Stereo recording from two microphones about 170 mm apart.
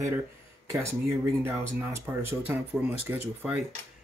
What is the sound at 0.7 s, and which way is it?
Speech, 15° right (ahead or behind).